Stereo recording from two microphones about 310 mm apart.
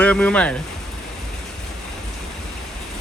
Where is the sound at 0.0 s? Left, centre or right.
Centre.